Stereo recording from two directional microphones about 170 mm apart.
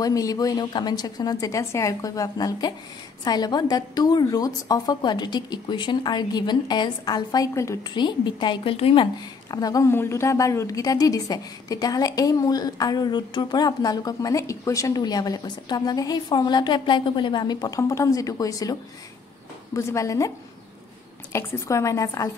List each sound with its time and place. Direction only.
0.0 s a woman's voice: 20° left (ahead or behind)